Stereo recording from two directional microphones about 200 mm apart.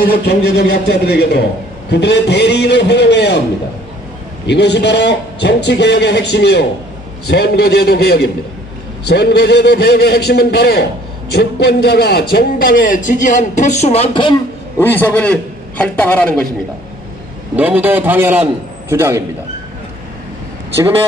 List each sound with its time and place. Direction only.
0.1 s a man's voice: 50° left (ahead or behind)
4.5 s a man's voice: 55° left (ahead or behind); by 14.3 s 25° left (ahead or behind)
14.8 s a woman's voice: 10° left (ahead or behind)
17.6 s a man's voice: 10° right (ahead or behind)